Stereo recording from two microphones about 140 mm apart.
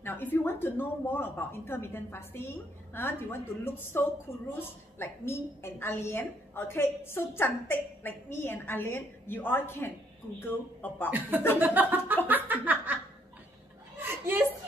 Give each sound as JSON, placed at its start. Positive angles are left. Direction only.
{"t": 0.0, "sound": "a woman's voice", "side_deg": 15}
{"t": 11.1, "sound": "a sound", "side_deg": -15}
{"t": 13.9, "sound": "chuckle", "side_deg": -15}